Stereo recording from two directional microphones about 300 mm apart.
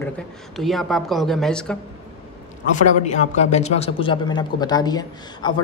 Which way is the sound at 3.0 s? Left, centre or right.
Left.